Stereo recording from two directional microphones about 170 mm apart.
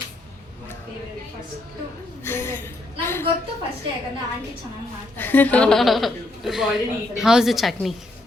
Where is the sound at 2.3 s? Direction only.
15° left (ahead or behind).